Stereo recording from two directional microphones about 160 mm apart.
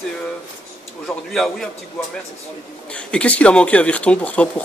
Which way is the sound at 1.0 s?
Centre (ahead or behind).